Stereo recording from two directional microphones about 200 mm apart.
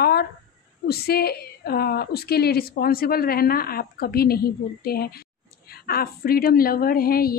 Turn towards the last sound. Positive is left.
turn(degrees=50)  # may be behind; listen again after turning